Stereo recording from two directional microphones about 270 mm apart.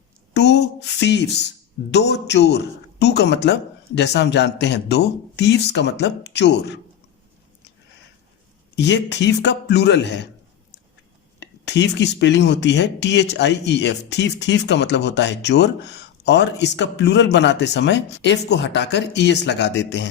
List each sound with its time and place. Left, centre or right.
0.3 s speech: left
8.7 s speech: left
11.3 s speech: left